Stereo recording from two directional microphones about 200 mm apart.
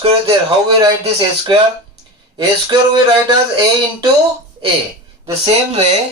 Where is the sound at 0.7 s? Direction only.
20° right (ahead or behind).